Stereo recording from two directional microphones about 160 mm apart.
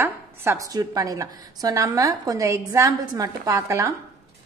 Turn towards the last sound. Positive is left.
turn(degrees=-20)  # may be behind; listen again after turning